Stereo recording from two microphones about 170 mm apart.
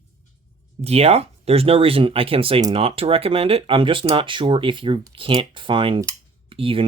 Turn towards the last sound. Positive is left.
turn(degrees=-30)  # may be behind; listen again after turning